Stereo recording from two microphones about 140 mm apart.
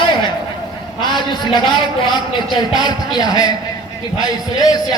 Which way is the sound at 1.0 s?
35° left (ahead or behind).